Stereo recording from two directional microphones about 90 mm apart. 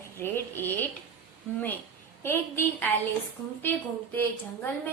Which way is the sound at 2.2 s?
25° left (ahead or behind).